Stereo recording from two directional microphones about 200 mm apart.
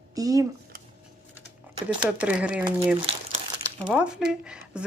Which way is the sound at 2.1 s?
5° right (ahead or behind).